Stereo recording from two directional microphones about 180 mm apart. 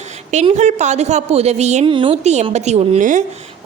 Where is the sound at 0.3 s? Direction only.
40° right (ahead or behind).